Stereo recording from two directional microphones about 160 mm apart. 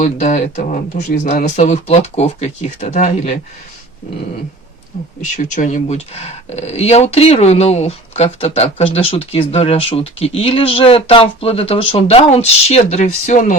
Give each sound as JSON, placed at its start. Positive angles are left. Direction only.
{"t": 0.0, "sound": "speech", "side_deg": 50}
{"t": 4.9, "sound": "speech", "side_deg": 50}